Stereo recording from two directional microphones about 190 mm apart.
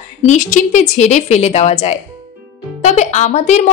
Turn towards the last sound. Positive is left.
turn(degrees=40)  # may be behind; listen again after turning